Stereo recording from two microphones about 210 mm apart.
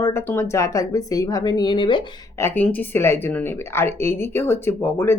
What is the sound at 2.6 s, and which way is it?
Speech, 5° left (ahead or behind).